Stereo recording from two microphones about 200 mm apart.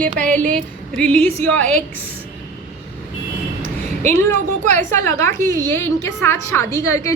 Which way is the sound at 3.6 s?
35° right (ahead or behind).